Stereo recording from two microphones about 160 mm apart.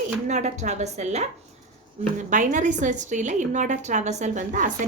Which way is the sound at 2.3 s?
50° right (ahead or behind).